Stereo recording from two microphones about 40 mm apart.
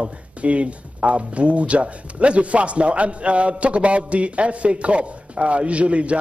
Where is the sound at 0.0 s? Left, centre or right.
Right.